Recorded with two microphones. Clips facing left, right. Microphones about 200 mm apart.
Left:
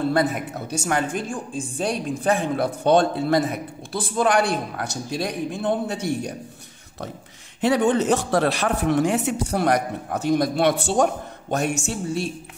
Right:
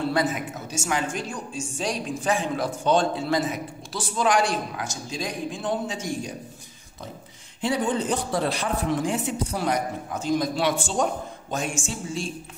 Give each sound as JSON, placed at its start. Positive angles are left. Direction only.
{"t": 0.0, "sound": "a woman's voice", "side_deg": 55}
{"t": 7.6, "sound": "a woman's voice", "side_deg": 70}